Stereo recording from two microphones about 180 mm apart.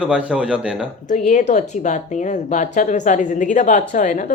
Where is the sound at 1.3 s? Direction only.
40° left (ahead or behind).